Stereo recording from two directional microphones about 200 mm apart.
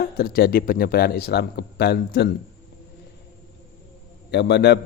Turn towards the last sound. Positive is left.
turn(degrees=60)  # may be behind; listen again after turning